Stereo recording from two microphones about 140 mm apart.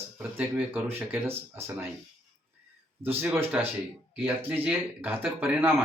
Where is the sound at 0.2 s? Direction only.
10° right (ahead or behind).